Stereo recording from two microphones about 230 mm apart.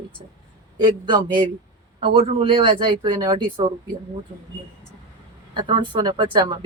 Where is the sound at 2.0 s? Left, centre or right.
Right.